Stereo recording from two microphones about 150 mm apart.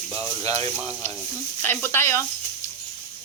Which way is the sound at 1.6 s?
15° left (ahead or behind).